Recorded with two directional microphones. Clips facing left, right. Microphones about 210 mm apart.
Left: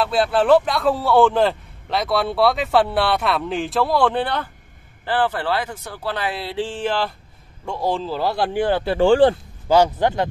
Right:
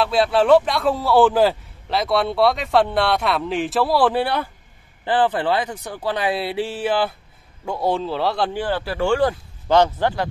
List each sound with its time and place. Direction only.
0.0 s speech: centre (ahead or behind)
8.5 s speech: 20° left (ahead or behind)
9.7 s a man's voice: 10° left (ahead or behind)